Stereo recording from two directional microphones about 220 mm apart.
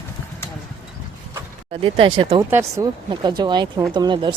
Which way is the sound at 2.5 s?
10° right (ahead or behind).